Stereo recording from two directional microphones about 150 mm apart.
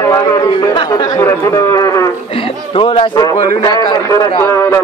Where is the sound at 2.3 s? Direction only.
35° left (ahead or behind).